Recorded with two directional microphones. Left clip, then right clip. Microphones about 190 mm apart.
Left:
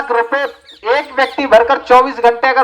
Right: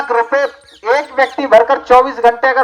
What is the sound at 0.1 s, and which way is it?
A woman's voice, 35° left (ahead or behind).